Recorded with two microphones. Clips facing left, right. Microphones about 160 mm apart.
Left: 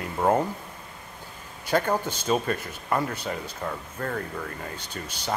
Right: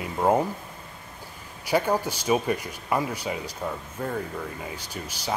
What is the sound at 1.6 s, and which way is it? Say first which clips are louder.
Speech: right 1 dB; 10° right (ahead or behind).